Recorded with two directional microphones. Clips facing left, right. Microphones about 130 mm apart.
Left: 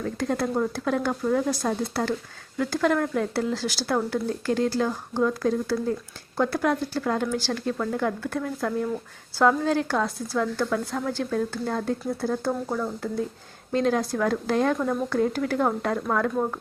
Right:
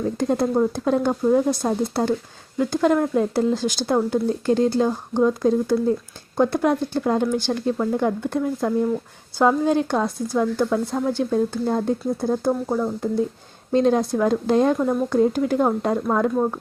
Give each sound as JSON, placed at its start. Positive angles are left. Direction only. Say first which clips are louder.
{"t": 0.0, "sound": "speech", "louder": "right 5 dB", "side_deg": -20}